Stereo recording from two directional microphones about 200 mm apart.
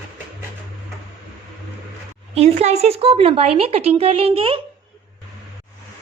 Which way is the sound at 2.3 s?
35° right (ahead or behind).